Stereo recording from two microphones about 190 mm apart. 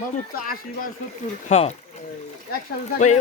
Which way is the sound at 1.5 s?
35° left (ahead or behind).